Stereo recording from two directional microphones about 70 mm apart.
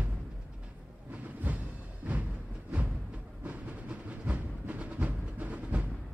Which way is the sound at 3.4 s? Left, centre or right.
Right.